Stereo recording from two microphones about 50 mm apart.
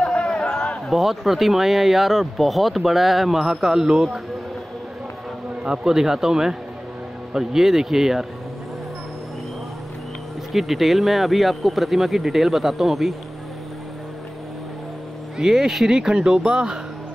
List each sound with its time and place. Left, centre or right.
0.0 s a sound: centre
0.8 s speech: centre
5.6 s speech: centre
10.5 s speech: centre
15.3 s speech: centre